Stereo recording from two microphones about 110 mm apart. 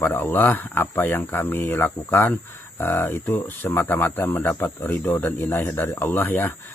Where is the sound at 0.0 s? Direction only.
20° left (ahead or behind).